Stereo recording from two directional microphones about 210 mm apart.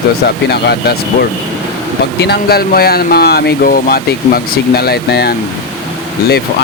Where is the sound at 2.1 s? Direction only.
50° left (ahead or behind).